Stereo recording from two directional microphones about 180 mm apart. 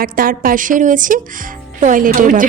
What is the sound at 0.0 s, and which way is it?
Speech, 50° right (ahead or behind).